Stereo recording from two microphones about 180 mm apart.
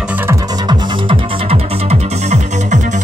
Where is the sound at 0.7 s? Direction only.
30° right (ahead or behind).